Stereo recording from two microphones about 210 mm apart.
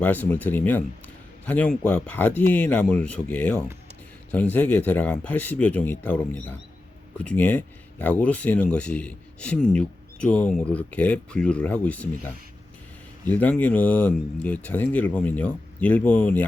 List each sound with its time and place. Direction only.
0.0 s speech: 10° left (ahead or behind)